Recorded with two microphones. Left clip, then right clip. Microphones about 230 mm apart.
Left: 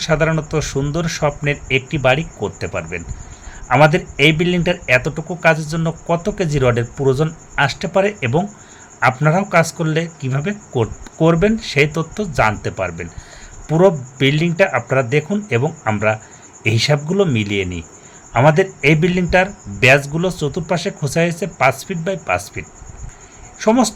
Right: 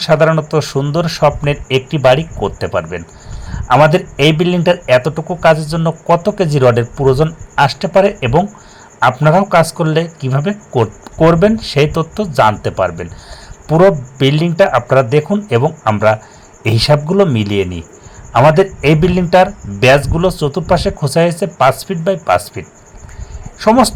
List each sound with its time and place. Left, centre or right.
0.0 s a man's voice: centre